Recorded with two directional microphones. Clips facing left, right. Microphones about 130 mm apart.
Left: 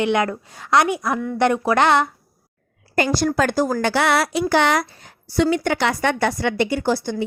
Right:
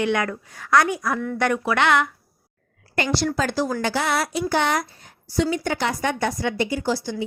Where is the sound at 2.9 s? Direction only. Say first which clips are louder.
Left 4 dB; 45° left (ahead or behind).